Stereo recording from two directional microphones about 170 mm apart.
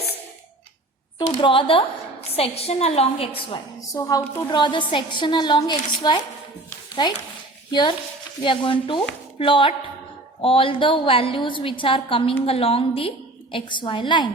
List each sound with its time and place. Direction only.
1.3 s a woman's voice: 30° left (ahead or behind)
3.8 s a woman's voice: 20° left (ahead or behind)